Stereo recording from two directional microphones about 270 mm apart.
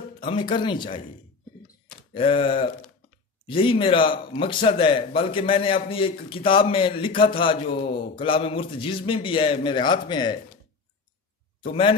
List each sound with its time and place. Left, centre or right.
0.2 s speech: centre
2.1 s a man's voice: centre
11.6 s a man's voice: centre